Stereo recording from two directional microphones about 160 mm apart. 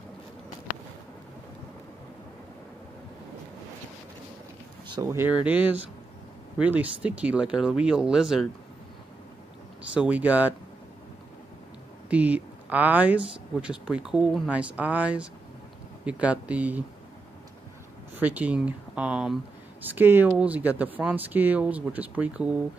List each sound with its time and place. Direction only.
4.8 s a sound: 30° right (ahead or behind)
5.1 s speech: 10° right (ahead or behind)
9.9 s speech: 10° right (ahead or behind)
12.1 s speech: 10° right (ahead or behind)
18.1 s speech: 10° right (ahead or behind)